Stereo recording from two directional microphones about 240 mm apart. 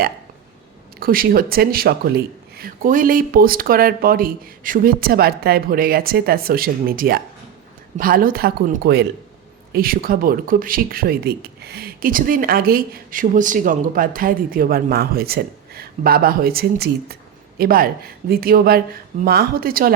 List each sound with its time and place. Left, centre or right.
0.9 s speech: right